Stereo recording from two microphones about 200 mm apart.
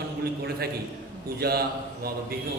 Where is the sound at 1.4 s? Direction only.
50° right (ahead or behind).